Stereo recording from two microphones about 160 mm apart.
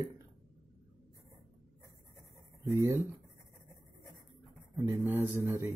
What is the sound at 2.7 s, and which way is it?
Speech, 20° right (ahead or behind).